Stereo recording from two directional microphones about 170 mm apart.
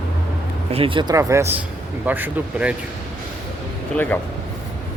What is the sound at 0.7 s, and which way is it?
Speech, 30° right (ahead or behind).